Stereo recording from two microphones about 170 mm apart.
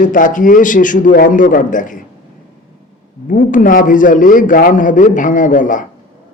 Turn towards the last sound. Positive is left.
turn(degrees=50)  # may be behind; listen again after turning